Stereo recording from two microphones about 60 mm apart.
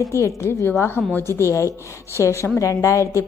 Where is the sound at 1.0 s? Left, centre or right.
Centre.